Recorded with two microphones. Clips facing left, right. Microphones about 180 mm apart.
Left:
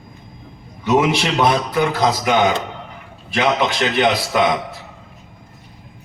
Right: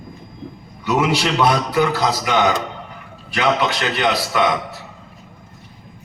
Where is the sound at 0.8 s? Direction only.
25° left (ahead or behind).